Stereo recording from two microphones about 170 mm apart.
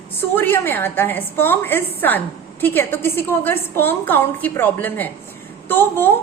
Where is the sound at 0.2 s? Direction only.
15° left (ahead or behind).